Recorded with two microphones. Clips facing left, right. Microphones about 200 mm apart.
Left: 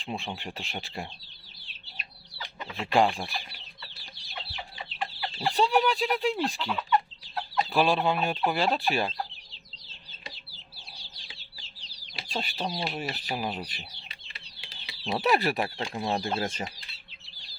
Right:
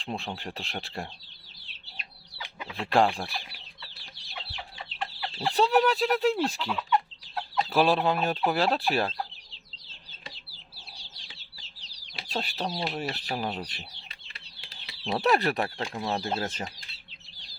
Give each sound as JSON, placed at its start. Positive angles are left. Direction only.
{"t": 0.0, "sound": "fowl", "side_deg": 0}
{"t": 2.4, "sound": "chicken", "side_deg": -5}
{"t": 7.6, "sound": "fowl", "side_deg": 0}
{"t": 10.2, "sound": "chicken", "side_deg": 0}
{"t": 11.8, "sound": "speech", "side_deg": 0}
{"t": 13.3, "sound": "chicken", "side_deg": 5}
{"t": 14.8, "sound": "speech", "side_deg": 0}